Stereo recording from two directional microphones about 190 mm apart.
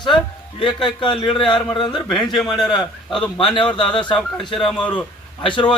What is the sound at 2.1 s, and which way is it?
Speech, centre (ahead or behind).